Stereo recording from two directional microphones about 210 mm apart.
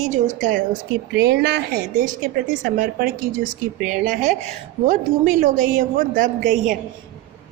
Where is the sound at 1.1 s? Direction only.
55° right (ahead or behind).